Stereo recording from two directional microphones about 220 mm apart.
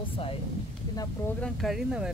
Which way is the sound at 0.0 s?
25° left (ahead or behind).